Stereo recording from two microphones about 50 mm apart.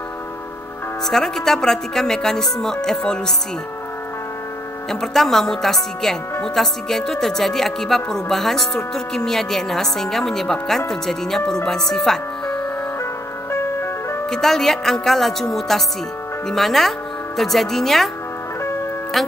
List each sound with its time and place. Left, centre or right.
1.0 s speech: centre
4.8 s speech: centre
13.0 s music: left
14.3 s speech: centre
19.2 s speech: centre